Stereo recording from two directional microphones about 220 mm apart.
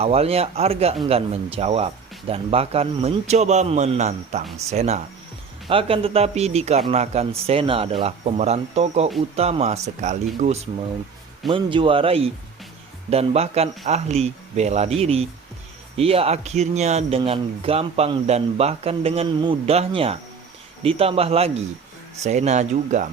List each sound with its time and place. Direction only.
0.0 s a man's voice: 25° right (ahead or behind)